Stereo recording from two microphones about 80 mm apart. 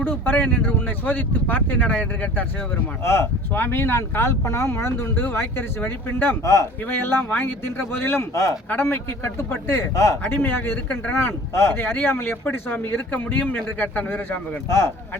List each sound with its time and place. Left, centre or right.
0.0 s speech: left
3.0 s speech: left
6.4 s speech: left
6.8 s speech: left
8.7 s speech: left
10.2 s speech: left